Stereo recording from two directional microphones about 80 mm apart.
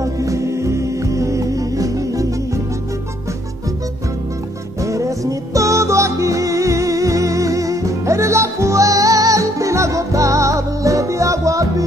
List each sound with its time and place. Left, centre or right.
0.0 s music: right
4.8 s music: right